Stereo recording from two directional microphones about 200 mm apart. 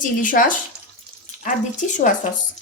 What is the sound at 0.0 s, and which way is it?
A woman's voice, 40° left (ahead or behind).